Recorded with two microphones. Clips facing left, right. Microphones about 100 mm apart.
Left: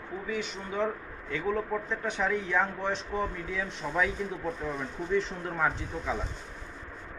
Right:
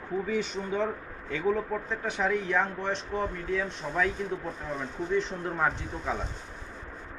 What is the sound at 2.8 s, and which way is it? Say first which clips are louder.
Speech: even; 5° left (ahead or behind).